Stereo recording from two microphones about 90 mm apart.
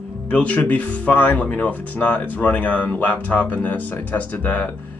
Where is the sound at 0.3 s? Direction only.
15° left (ahead or behind).